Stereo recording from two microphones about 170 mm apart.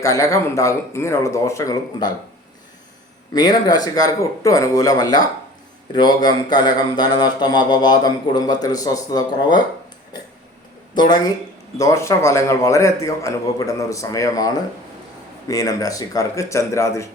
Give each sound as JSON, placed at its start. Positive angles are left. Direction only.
{"t": 0.0, "sound": "a man's voice", "side_deg": 20}
{"t": 3.3, "sound": "speech", "side_deg": 25}
{"t": 10.9, "sound": "a man's voice", "side_deg": 25}